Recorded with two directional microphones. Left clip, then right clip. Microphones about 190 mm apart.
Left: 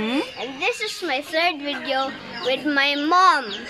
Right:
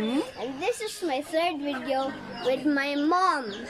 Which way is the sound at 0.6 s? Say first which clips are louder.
Left 5 dB; 15° right (ahead or behind).